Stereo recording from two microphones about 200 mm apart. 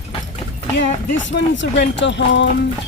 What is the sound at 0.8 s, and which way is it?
Speech, 65° left (ahead or behind).